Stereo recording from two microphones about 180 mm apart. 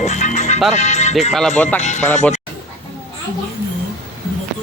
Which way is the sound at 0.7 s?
40° left (ahead or behind).